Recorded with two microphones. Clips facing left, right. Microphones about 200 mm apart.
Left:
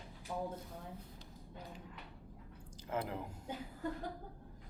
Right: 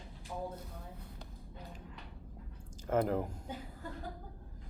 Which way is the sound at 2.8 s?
45° right (ahead or behind).